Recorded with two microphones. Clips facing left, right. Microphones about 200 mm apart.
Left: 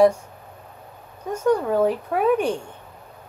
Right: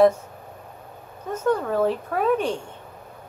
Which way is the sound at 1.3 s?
15° left (ahead or behind).